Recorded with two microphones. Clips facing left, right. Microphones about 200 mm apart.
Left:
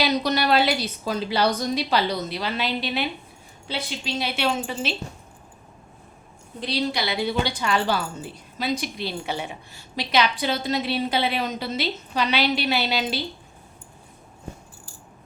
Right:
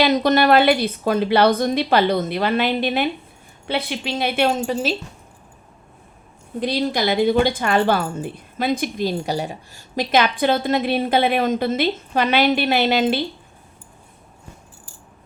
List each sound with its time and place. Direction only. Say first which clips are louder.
0.0 s a woman's voice: right 6 dB; 50° right (ahead or behind)
6.6 s a woman's voice: right 5 dB; 50° right (ahead or behind)